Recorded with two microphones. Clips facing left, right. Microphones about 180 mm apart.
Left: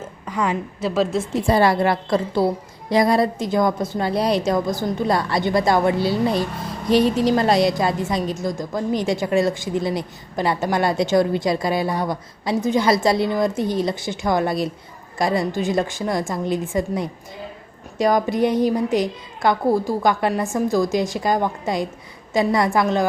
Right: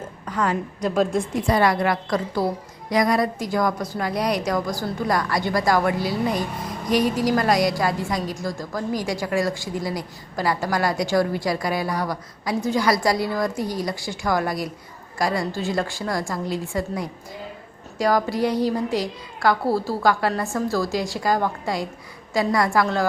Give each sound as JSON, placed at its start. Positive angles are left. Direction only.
{"t": 0.0, "sound": "a woman's voice", "side_deg": 10}
{"t": 1.5, "sound": "a woman's voice", "side_deg": 30}